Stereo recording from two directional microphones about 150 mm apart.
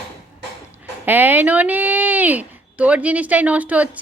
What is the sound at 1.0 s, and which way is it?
Speech, 10° right (ahead or behind).